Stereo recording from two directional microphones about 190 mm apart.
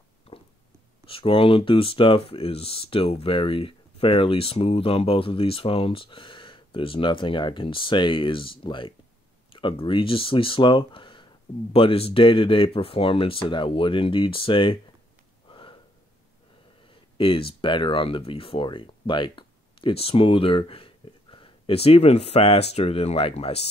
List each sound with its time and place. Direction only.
1.0 s speech: 30° left (ahead or behind)
15.4 s a sound: 25° left (ahead or behind)
17.2 s speech: 30° left (ahead or behind)